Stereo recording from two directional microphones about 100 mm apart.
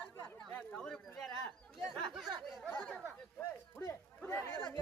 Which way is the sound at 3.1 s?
20° left (ahead or behind).